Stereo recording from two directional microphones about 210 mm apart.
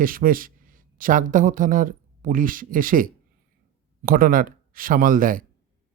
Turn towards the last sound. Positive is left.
turn(degrees=-40)  # may be behind; listen again after turning